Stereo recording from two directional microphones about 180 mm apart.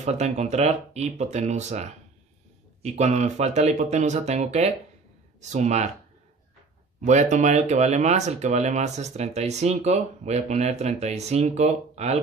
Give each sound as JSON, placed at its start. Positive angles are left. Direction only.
{"t": 0.0, "sound": "speech", "side_deg": -40}
{"t": 7.1, "sound": "speech", "side_deg": -40}